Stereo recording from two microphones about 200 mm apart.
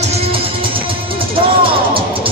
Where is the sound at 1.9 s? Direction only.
25° right (ahead or behind).